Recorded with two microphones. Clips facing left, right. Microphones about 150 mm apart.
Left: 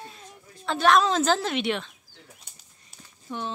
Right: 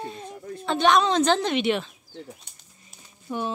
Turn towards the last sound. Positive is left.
turn(degrees=-10)  # may be behind; listen again after turning